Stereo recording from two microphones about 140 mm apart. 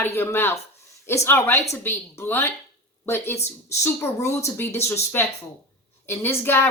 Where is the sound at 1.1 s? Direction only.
15° left (ahead or behind).